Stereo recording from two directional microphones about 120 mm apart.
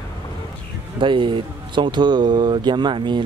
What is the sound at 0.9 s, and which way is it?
Speech, 45° right (ahead or behind).